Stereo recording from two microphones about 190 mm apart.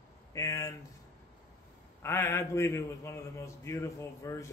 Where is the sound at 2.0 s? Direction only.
15° left (ahead or behind).